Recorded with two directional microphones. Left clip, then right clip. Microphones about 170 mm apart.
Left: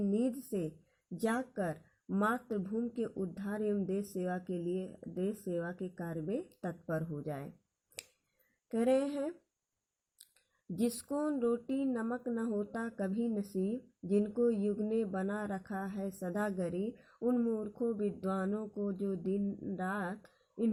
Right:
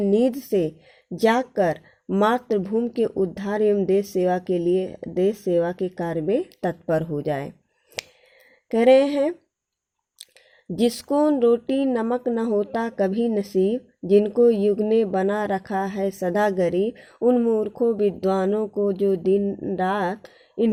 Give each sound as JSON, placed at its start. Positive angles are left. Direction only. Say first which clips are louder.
{"t": 0.0, "sound": "speech", "louder": "right 15 dB", "side_deg": -35}
{"t": 8.7, "sound": "speech", "louder": "right 16 dB", "side_deg": -35}
{"t": 10.8, "sound": "speech", "louder": "right 15 dB", "side_deg": -30}